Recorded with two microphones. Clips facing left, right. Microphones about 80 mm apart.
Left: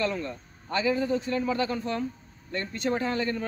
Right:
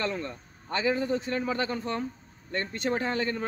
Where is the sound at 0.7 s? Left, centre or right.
Right.